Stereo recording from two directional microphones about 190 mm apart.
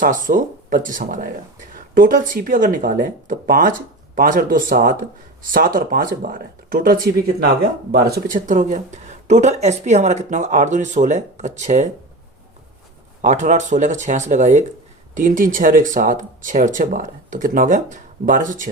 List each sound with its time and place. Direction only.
0.0 s speech: 45° right (ahead or behind)
13.2 s speech: 40° right (ahead or behind)